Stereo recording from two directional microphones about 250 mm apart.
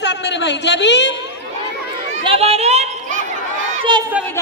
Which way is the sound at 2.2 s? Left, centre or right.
Right.